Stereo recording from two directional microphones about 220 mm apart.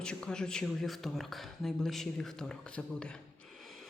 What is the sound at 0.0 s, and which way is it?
Speech, 5° left (ahead or behind).